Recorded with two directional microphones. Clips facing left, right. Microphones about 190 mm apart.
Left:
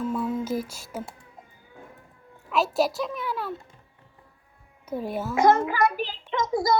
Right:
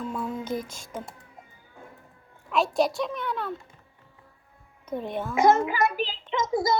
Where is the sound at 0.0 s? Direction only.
5° left (ahead or behind).